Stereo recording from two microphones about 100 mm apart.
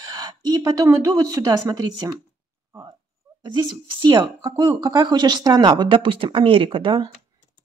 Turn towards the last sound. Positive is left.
turn(degrees=-55)  # may be behind; listen again after turning